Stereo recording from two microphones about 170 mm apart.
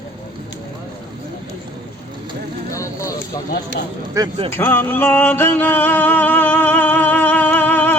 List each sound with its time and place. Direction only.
2.7 s vehicle: 20° left (ahead or behind)
3.5 s speech: 80° left
4.5 s music: 10° left (ahead or behind)